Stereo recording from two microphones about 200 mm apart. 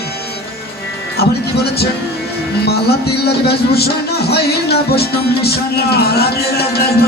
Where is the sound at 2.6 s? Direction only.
55° left (ahead or behind).